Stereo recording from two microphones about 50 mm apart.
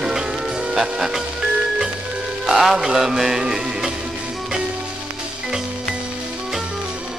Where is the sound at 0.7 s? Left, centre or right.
Centre.